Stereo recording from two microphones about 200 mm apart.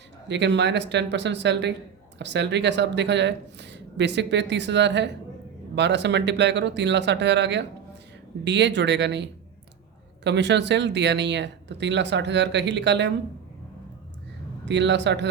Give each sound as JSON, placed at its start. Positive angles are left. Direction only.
{"t": 0.3, "sound": "speech", "side_deg": -60}
{"t": 14.6, "sound": "speech", "side_deg": -60}